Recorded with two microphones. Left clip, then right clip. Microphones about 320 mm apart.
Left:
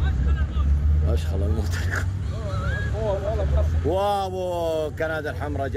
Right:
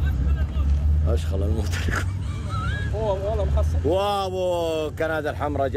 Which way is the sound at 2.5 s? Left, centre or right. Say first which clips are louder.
Right 1 dB; centre.